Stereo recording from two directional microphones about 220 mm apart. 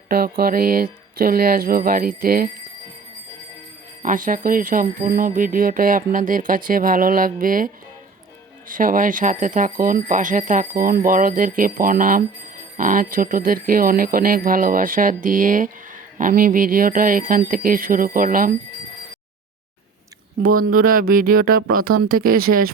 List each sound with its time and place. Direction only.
0.1 s speech: 45° right (ahead or behind)
4.0 s speech: 35° right (ahead or behind)
8.7 s speech: 40° right (ahead or behind)
20.4 s speech: 85° right
20.7 s speech: 40° right (ahead or behind)